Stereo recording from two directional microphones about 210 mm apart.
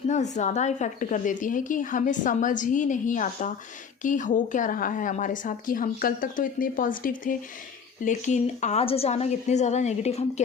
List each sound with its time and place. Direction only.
0.1 s a woman's voice: 35° left (ahead or behind)